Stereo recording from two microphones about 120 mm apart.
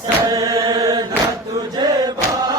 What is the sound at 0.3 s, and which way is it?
Chant, 30° right (ahead or behind).